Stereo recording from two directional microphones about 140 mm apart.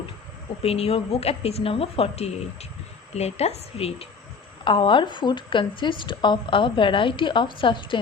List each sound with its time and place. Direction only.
0.6 s a woman's voice: 45° left (ahead or behind)